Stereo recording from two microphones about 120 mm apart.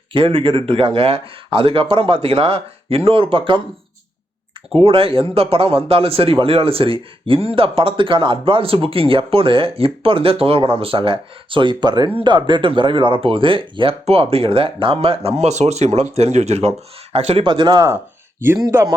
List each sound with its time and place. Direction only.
0.1 s speech: 50° right (ahead or behind)
4.7 s speech: 50° right (ahead or behind)
17.4 s speech: 40° right (ahead or behind)
17.8 s speech: 20° right (ahead or behind)